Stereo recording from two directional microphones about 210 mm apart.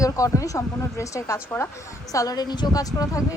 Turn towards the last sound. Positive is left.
turn(degrees=15)  # may be behind; listen again after turning